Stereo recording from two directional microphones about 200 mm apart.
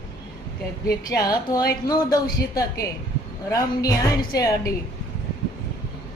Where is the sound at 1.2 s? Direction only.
20° left (ahead or behind).